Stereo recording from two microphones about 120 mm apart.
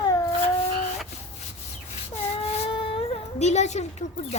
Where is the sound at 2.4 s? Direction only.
50° left (ahead or behind).